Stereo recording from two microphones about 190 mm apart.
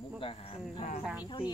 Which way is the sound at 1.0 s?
10° right (ahead or behind).